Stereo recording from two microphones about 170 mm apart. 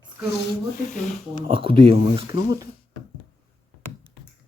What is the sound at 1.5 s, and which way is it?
Speech, 30° right (ahead or behind).